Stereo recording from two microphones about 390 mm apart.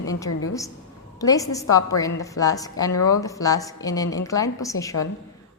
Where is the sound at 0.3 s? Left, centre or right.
Left.